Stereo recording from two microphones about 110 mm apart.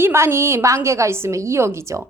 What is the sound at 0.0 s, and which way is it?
A woman's voice, 20° right (ahead or behind).